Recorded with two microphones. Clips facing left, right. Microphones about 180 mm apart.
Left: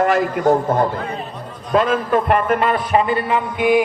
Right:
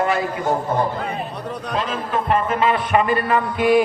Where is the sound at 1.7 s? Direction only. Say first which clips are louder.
Left 8 dB; 55° left (ahead or behind).